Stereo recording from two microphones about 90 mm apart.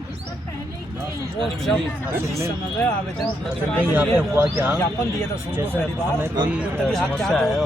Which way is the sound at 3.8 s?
20° right (ahead or behind).